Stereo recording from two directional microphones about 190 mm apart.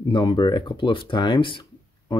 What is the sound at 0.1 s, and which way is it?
Speech, 25° left (ahead or behind).